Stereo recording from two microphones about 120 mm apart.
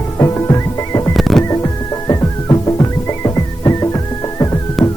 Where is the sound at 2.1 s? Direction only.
30° left (ahead or behind).